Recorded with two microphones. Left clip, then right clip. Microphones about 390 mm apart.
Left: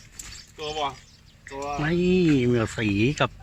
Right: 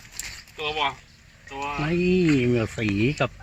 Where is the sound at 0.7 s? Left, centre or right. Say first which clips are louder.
Right 3 dB; centre.